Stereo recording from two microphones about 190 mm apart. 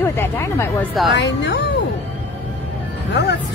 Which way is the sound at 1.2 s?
65° left (ahead or behind).